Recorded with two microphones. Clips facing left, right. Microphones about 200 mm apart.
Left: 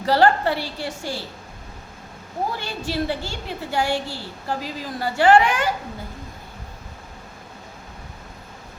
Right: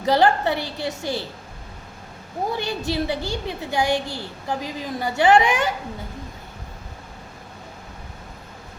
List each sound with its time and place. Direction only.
0.0 s a woman's voice: 20° right (ahead or behind)
2.6 s a woman's voice: 20° right (ahead or behind)